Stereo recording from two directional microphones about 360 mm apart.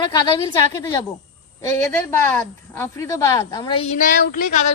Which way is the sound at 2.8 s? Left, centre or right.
Centre.